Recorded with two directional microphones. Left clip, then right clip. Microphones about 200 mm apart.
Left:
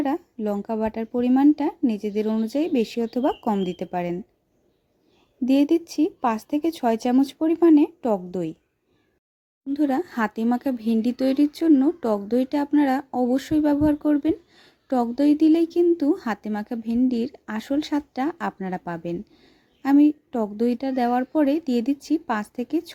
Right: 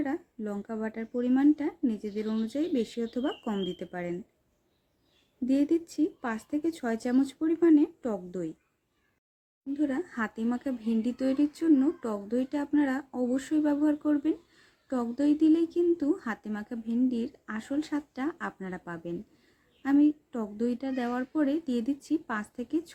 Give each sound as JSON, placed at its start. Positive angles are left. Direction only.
{"t": 0.0, "sound": "speech", "side_deg": 35}
{"t": 5.5, "sound": "speech", "side_deg": 35}
{"t": 9.7, "sound": "speech", "side_deg": 40}